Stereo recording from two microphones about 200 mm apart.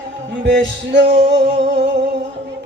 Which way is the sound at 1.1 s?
60° right (ahead or behind).